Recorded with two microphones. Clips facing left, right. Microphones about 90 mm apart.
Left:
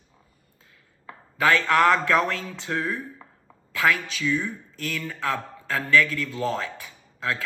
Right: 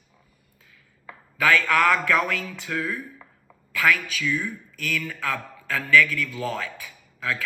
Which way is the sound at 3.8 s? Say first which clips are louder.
Even; 30° left (ahead or behind).